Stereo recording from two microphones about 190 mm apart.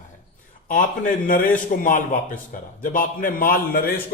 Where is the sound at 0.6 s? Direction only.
45° left (ahead or behind).